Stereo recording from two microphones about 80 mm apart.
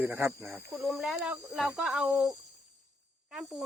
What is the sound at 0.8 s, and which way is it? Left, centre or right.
Speech, centre.